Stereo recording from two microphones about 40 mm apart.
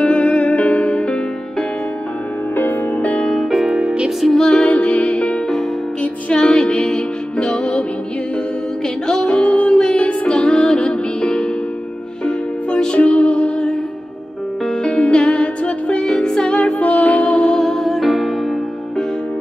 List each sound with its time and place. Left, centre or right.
0.0 s music: left
3.7 s music: right
4.4 s music: centre
4.6 s music: left
6.3 s music: centre
9.0 s music: left
9.5 s music: left
9.8 s music: left
10.3 s music: centre
13.0 s music: left
14.8 s music: left
16.1 s music: centre
16.5 s music: left
17.5 s music: centre